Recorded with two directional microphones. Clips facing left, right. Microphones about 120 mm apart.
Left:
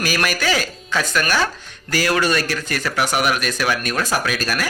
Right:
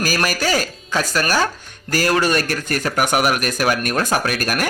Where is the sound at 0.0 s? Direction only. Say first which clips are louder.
Right 1 dB; 40° right (ahead or behind).